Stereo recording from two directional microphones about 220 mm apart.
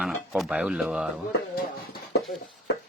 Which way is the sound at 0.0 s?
Centre (ahead or behind).